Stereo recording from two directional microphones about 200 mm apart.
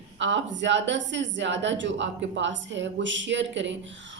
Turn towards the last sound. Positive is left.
turn(degrees=-65)  # may be behind; listen again after turning